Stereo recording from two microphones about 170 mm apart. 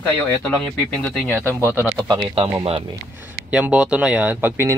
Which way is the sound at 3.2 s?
10° right (ahead or behind).